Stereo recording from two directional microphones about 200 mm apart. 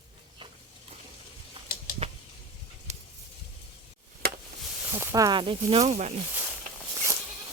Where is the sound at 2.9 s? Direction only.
35° right (ahead or behind).